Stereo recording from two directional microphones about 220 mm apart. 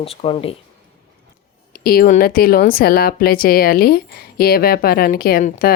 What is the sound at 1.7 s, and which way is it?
A woman's voice, 45° left (ahead or behind).